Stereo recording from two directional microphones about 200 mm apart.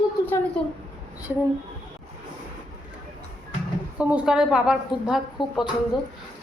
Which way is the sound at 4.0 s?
5° right (ahead or behind).